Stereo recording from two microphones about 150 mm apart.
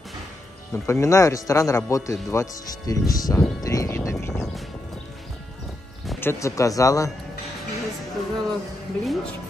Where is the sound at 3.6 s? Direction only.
20° left (ahead or behind).